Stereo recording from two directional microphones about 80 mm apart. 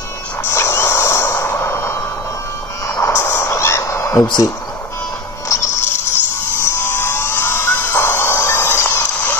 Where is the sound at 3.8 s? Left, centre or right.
Left.